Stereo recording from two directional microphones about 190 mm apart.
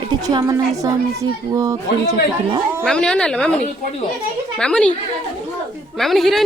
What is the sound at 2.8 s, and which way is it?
A woman's voice, 5° left (ahead or behind).